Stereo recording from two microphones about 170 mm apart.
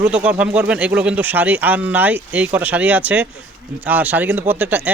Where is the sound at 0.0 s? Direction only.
10° right (ahead or behind).